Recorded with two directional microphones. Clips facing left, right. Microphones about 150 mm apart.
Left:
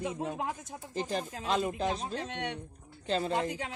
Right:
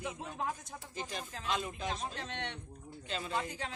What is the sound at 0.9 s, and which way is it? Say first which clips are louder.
Speech: left 9 dB; 35° left (ahead or behind).